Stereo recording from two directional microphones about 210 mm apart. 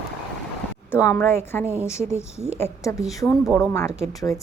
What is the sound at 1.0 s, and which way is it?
A woman's voice, 10° left (ahead or behind).